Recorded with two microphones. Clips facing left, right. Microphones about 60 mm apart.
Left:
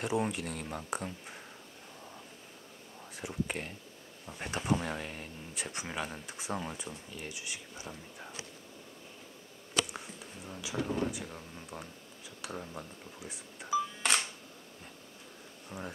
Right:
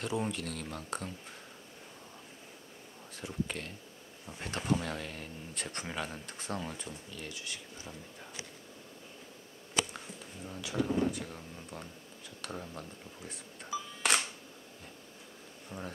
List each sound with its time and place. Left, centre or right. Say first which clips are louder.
0.0 s speech: left 2 dB; centre
3.2 s speech: left 1 dB; centre
9.9 s speech: left 1 dB; centre
15.7 s speech: even; centre